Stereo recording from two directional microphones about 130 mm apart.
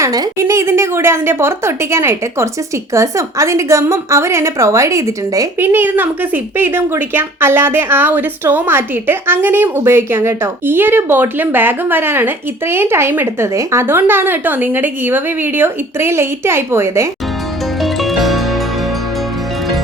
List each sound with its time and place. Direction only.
0.0 s a woman's voice: 25° right (ahead or behind)
17.8 s music: centre (ahead or behind)